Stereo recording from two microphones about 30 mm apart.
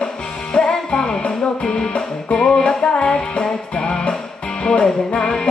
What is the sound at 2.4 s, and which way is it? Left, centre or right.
Music, left.